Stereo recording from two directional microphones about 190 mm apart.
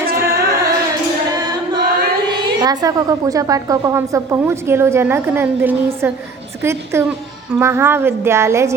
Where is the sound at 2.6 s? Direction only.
20° right (ahead or behind).